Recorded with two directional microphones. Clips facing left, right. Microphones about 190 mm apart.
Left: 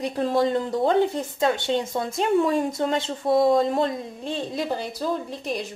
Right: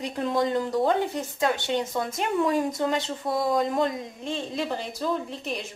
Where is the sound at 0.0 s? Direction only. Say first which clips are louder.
Left 3 dB; 30° left (ahead or behind).